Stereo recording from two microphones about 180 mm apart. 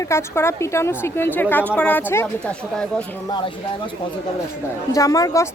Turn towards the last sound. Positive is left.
turn(degrees=20)  # may be behind; listen again after turning